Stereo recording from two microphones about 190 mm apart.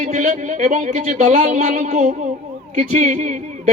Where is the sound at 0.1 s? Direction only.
40° right (ahead or behind).